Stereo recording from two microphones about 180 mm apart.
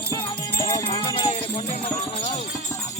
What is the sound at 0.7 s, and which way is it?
Music, 25° left (ahead or behind).